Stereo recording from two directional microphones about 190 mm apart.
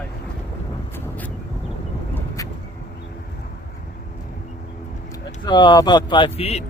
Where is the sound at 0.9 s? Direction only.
10° left (ahead or behind).